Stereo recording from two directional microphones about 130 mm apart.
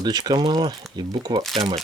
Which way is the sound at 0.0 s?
30° right (ahead or behind).